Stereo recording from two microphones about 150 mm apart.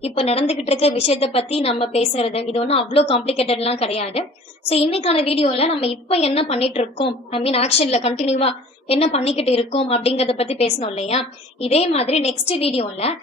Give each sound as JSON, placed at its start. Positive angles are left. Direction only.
{"t": 0.0, "sound": "a woman's voice", "side_deg": 40}